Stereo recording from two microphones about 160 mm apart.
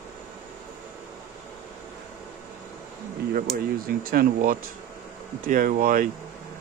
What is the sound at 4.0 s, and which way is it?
Speech, 65° right (ahead or behind).